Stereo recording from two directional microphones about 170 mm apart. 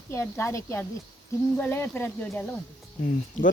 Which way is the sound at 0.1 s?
15° left (ahead or behind).